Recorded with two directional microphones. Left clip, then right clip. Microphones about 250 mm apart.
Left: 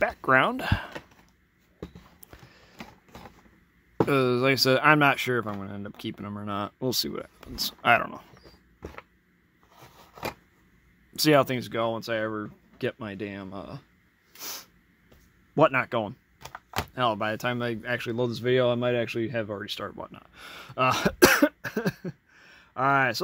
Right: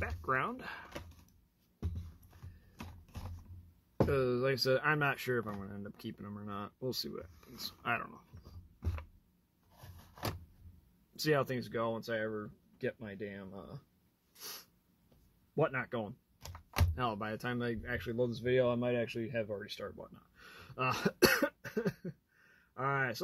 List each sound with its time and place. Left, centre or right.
0.0 s speech: left
4.1 s speech: left
11.1 s speech: left
14.4 s snort: left
15.5 s speech: left
16.4 s a sound: centre
16.8 s speech: left
20.4 s cough: left